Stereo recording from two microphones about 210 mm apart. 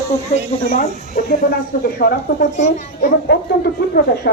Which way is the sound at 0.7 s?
40° left (ahead or behind).